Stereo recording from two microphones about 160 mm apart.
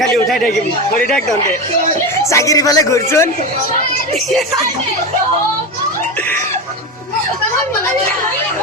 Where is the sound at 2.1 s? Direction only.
20° left (ahead or behind).